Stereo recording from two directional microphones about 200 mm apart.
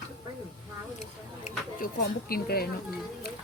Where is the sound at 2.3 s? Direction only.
50° left (ahead or behind).